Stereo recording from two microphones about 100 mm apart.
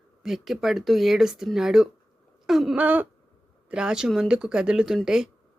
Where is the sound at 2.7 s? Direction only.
15° right (ahead or behind).